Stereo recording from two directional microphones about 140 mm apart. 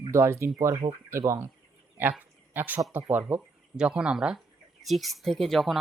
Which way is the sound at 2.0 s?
15° right (ahead or behind).